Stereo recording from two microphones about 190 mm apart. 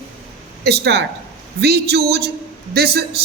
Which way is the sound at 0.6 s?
60° right (ahead or behind).